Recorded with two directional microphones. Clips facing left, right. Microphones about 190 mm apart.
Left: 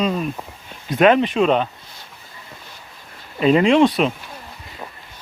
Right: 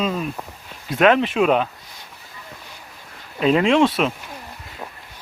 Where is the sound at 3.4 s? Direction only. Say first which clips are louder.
Left 2 dB; centre (ahead or behind).